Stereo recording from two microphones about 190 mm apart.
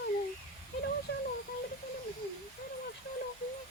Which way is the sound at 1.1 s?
60° left (ahead or behind).